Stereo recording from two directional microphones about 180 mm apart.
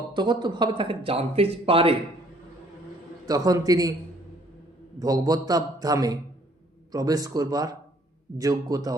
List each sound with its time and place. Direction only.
0.1 s speech: 25° right (ahead or behind)
3.2 s speech: 20° right (ahead or behind)
4.9 s speech: 20° right (ahead or behind)